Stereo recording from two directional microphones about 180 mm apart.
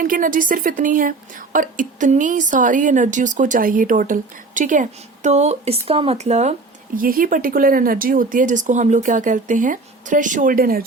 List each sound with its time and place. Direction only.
0.0 s a woman's voice: 50° right (ahead or behind)